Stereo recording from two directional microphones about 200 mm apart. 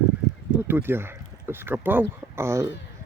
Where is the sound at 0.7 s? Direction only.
10° right (ahead or behind).